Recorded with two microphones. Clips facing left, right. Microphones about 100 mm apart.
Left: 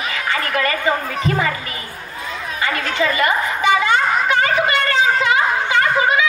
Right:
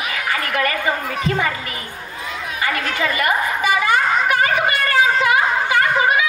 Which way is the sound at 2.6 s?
25° left (ahead or behind).